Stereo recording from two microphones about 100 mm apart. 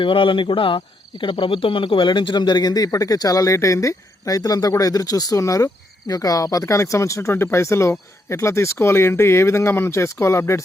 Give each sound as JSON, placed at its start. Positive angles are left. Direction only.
{"t": 0.0, "sound": "speech", "side_deg": 60}